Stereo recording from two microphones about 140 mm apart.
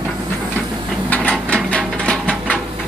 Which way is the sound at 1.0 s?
10° left (ahead or behind).